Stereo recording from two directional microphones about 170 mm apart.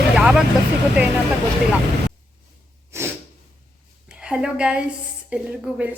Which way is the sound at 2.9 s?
15° right (ahead or behind).